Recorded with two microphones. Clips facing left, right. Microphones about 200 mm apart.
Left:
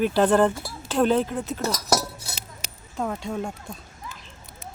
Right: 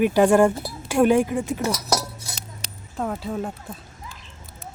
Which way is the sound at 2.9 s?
5° right (ahead or behind).